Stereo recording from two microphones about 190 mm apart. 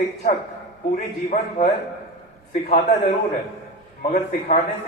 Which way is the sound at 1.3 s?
35° left (ahead or behind).